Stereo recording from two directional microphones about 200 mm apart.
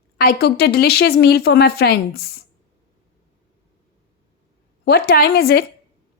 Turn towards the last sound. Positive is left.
turn(degrees=50)  # may be behind; listen again after turning